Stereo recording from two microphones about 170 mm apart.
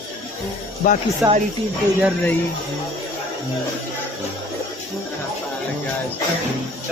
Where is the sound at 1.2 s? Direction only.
10° right (ahead or behind).